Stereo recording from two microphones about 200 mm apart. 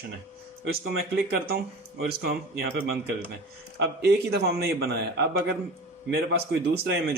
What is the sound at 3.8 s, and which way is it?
A man's voice, 55° right (ahead or behind).